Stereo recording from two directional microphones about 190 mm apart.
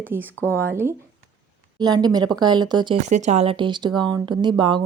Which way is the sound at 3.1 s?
35° right (ahead or behind).